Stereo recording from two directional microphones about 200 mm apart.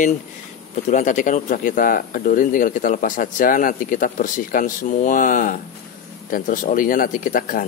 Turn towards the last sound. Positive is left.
turn(degrees=45)  # may be behind; listen again after turning